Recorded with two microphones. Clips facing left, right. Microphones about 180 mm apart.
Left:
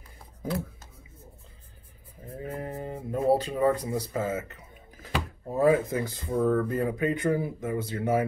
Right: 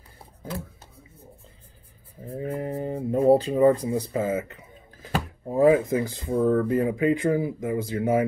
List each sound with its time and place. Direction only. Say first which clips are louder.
2.2 s speech: right 6 dB; 30° right (ahead or behind)